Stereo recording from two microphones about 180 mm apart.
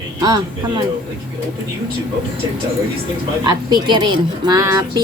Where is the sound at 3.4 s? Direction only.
25° right (ahead or behind).